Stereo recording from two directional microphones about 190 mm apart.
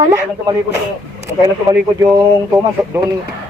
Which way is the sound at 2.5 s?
20° right (ahead or behind).